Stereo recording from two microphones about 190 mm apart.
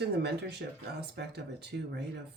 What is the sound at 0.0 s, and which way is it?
Speech, 60° right (ahead or behind).